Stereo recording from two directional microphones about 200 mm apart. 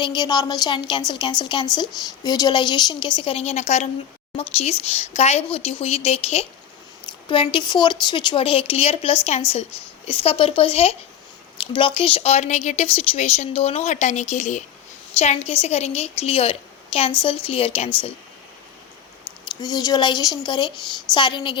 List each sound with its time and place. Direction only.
0.0 s a woman's voice: 20° left (ahead or behind)
19.6 s a woman's voice: 20° left (ahead or behind)